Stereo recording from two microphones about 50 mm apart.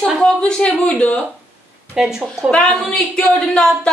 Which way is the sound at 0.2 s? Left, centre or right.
Centre.